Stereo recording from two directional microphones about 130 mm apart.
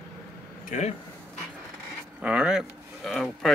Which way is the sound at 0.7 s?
65° left (ahead or behind).